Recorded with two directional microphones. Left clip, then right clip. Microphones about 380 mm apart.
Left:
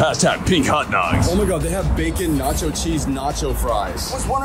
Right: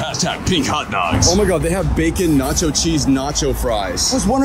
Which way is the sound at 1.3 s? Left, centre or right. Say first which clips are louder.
Right 4 dB; right.